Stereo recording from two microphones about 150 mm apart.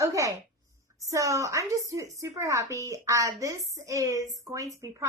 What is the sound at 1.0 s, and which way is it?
Speech, 20° right (ahead or behind).